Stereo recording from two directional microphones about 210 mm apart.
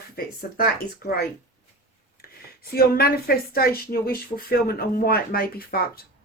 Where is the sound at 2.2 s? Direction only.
45° left (ahead or behind).